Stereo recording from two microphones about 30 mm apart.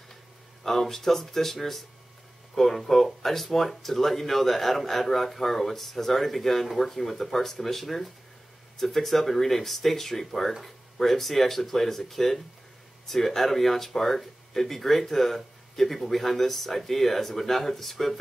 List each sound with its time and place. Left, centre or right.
0.7 s speech: centre